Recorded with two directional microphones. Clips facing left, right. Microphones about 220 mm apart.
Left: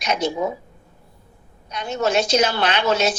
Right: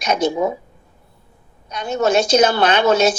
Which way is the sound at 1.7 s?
45° right (ahead or behind).